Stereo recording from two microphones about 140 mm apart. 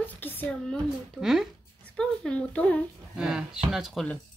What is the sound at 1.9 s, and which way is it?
Speech, 10° left (ahead or behind).